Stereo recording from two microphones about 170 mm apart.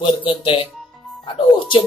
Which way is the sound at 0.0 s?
30° left (ahead or behind).